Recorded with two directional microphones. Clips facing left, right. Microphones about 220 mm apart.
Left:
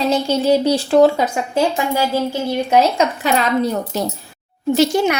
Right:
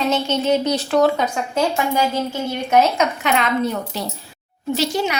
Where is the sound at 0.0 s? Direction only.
35° left (ahead or behind).